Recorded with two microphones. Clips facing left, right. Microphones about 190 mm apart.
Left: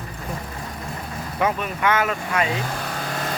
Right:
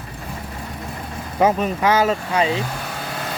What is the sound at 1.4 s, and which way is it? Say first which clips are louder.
Speech: right 6 dB; 30° right (ahead or behind).